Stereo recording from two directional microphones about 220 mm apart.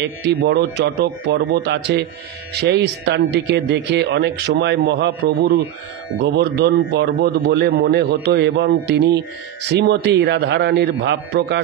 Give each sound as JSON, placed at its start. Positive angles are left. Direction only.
{"t": 0.4, "sound": "speech", "side_deg": -50}